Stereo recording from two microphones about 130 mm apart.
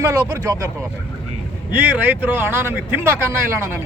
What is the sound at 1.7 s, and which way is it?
Speech, 10° right (ahead or behind).